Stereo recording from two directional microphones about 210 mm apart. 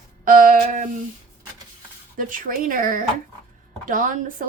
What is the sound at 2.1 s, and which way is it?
Speech, 40° right (ahead or behind).